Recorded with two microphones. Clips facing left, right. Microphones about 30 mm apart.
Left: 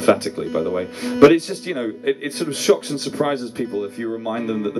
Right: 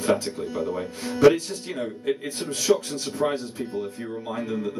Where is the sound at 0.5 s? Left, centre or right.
Left.